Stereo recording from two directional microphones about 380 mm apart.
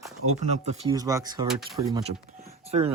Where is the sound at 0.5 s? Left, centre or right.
Centre.